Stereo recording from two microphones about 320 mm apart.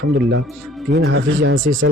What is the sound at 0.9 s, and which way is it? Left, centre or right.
Speech, right.